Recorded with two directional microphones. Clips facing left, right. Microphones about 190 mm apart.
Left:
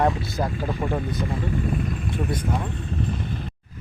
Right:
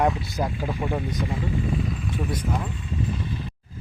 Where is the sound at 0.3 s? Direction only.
10° right (ahead or behind).